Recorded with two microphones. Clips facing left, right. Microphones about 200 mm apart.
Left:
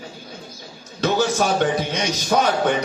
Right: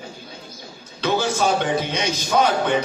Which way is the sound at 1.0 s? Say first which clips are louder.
Left 1 dB; 50° left (ahead or behind).